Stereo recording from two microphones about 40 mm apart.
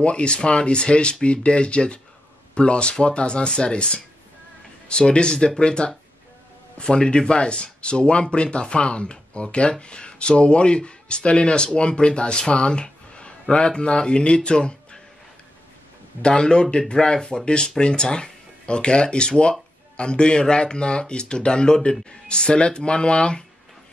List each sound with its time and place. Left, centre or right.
0.0 s speech: left
16.2 s speech: left